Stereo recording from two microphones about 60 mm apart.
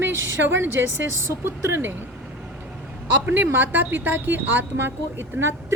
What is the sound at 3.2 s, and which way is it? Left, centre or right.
Speech, right.